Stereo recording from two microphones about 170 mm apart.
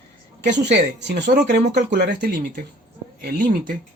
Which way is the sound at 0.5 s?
90° right.